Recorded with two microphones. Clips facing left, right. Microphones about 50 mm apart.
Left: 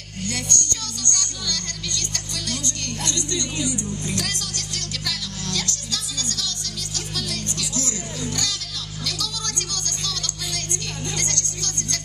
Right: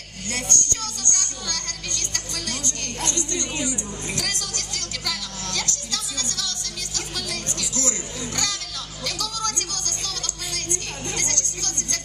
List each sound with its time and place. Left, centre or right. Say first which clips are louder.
0.3 s music: right 1 dB; right
11.1 s music: even; right